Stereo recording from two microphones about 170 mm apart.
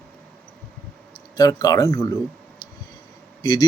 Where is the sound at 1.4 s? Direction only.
20° left (ahead or behind).